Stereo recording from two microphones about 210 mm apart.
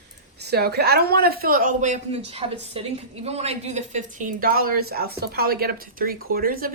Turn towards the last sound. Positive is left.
turn(degrees=-45)  # may be behind; listen again after turning